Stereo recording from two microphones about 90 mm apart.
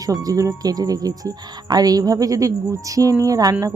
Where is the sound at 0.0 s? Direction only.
40° right (ahead or behind).